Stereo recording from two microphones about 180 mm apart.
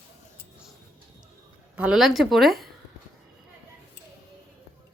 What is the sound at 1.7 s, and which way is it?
Speech, 5° right (ahead or behind).